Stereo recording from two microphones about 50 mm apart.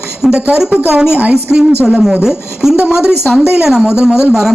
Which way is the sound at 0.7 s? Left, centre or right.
Right.